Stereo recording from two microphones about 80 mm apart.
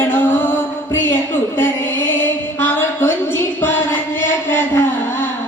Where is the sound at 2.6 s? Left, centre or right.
Left.